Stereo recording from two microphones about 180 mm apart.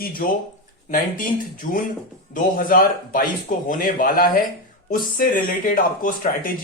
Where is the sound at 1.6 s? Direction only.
45° left (ahead or behind).